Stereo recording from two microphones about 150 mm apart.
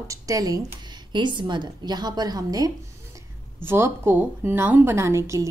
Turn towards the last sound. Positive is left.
turn(degrees=-20)  # may be behind; listen again after turning